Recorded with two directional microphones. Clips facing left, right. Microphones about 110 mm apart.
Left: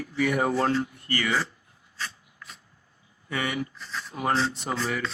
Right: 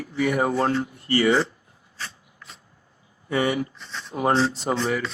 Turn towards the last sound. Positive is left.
turn(degrees=-30)  # may be behind; listen again after turning